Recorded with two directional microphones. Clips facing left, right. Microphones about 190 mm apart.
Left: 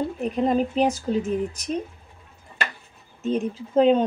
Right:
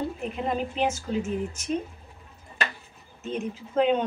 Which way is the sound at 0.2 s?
40° left (ahead or behind).